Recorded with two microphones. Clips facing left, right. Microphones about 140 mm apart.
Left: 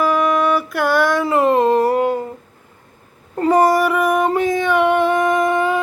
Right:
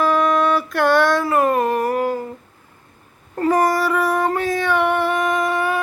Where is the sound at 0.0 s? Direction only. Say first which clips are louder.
Left 1 dB; 10° left (ahead or behind).